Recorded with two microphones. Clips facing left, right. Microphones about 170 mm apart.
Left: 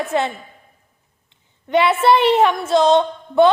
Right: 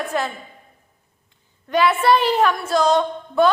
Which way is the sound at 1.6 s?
25° left (ahead or behind).